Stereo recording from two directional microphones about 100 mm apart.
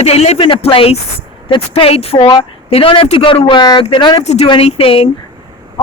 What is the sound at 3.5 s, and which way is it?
Speech, 50° left (ahead or behind).